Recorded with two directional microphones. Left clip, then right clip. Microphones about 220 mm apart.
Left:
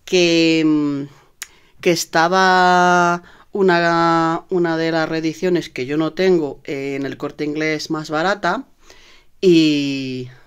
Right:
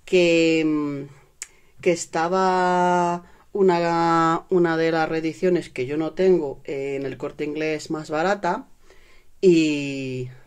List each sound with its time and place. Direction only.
0.0 s speech: 25° left (ahead or behind)